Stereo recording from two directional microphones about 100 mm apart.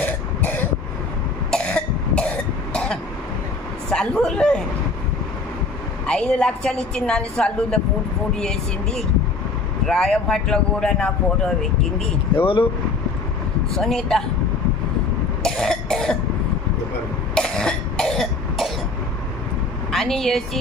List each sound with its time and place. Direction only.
0.0 s throat clearing: 20° left (ahead or behind)
1.5 s cough: 10° left (ahead or behind)
3.9 s a sound: 10° left (ahead or behind)
6.0 s a woman's voice: 10° left (ahead or behind)
12.4 s speech: 60° left (ahead or behind)
13.7 s speech: 5° left (ahead or behind)
15.4 s cough: 5° left (ahead or behind)
17.3 s cough: 5° left (ahead or behind)
19.9 s a woman's voice: 5° left (ahead or behind)